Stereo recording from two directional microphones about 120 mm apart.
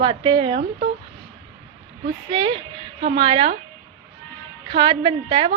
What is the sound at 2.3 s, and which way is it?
A woman's voice, 45° right (ahead or behind).